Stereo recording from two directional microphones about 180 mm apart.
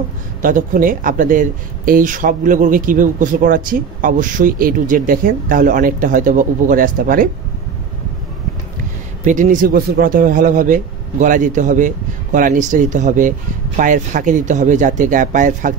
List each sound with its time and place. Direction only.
0.4 s speech: 50° right (ahead or behind)
9.2 s speech: 45° right (ahead or behind)